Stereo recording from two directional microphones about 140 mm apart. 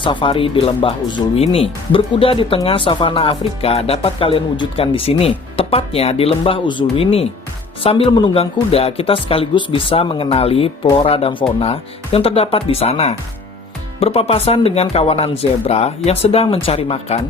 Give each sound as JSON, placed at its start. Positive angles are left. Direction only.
{"t": 0.0, "sound": "speech", "side_deg": 35}